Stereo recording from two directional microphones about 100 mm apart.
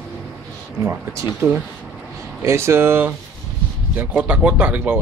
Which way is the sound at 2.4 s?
25° right (ahead or behind).